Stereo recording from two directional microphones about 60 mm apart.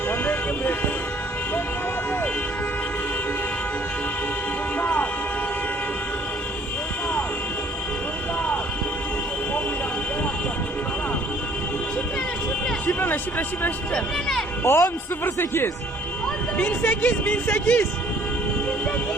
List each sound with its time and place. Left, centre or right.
0.1 s vehicle: left
4.8 s music: left
12.9 s a sound: left
13.9 s speech: centre
14.6 s speech: left
15.2 s speech: left